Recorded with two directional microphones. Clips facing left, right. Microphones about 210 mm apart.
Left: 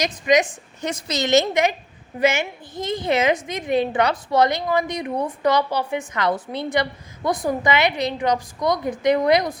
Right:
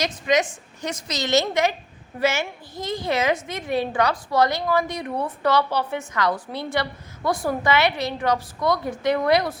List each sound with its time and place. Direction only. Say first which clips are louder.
0.0 s a woman's voice: left 3 dB; 15° left (ahead or behind)
0.9 s a woman's voice: left 4 dB; 30° left (ahead or behind)